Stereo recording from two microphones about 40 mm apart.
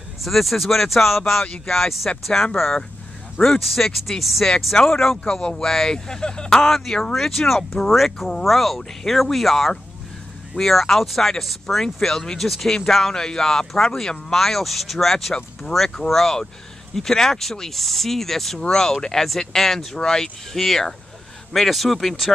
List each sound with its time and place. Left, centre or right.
0.2 s speech: centre
3.3 s speech: centre
6.6 s speech: centre